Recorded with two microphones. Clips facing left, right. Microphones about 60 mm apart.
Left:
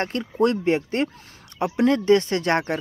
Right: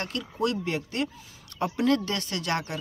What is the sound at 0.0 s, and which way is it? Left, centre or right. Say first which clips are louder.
Speech: left 7 dB; left.